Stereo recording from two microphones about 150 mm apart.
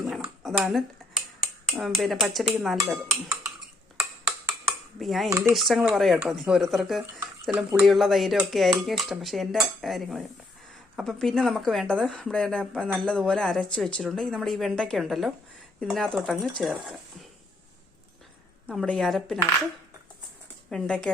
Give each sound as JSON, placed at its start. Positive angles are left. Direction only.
{"t": 0.0, "sound": "dishes", "side_deg": 0}
{"t": 1.6, "sound": "speech", "side_deg": -5}
{"t": 3.1, "sound": "speech", "side_deg": -15}
{"t": 4.9, "sound": "speech", "side_deg": 0}
{"t": 18.7, "sound": "speech", "side_deg": 0}
{"t": 20.7, "sound": "speech", "side_deg": 5}